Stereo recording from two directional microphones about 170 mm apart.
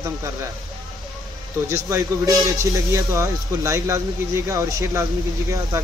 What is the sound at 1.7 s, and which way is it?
Speech, 15° right (ahead or behind).